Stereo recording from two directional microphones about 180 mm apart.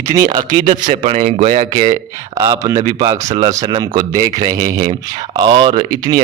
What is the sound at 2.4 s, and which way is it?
Speech, 20° right (ahead or behind).